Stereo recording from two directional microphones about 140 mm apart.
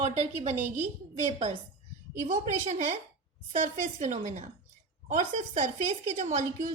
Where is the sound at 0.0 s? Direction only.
55° right (ahead or behind).